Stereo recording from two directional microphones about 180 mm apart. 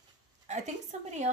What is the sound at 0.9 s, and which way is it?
Speech, 40° right (ahead or behind).